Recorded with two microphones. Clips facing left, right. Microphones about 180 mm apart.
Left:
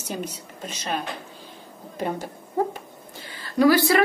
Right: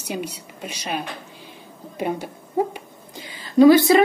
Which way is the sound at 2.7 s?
15° right (ahead or behind).